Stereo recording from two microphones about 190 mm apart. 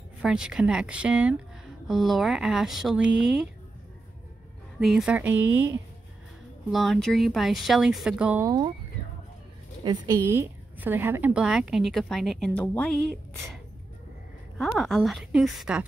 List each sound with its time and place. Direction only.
0.2 s a woman's voice: 5° right (ahead or behind)
4.7 s a woman's voice: 5° right (ahead or behind)
8.5 s speech: 25° right (ahead or behind)
9.8 s a woman's voice: 15° right (ahead or behind); by 13.6 s centre (ahead or behind)
14.6 s a woman's voice: centre (ahead or behind)